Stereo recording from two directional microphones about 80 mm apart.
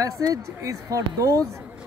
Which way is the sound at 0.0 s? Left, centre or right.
Right.